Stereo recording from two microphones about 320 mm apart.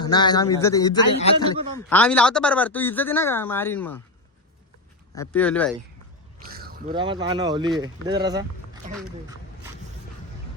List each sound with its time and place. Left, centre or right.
0.0 s speech: centre
1.9 s speech: centre
5.1 s speech: centre
6.5 s a sound: right
6.9 s speech: centre